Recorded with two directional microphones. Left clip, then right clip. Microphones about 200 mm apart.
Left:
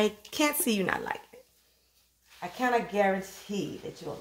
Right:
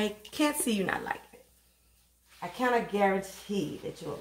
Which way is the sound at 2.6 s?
25° left (ahead or behind).